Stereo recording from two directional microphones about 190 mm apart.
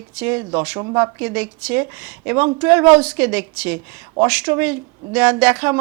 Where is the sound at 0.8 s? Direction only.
20° right (ahead or behind).